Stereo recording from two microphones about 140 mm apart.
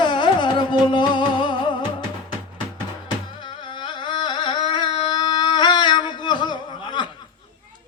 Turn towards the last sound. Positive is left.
turn(degrees=35)  # may be behind; listen again after turning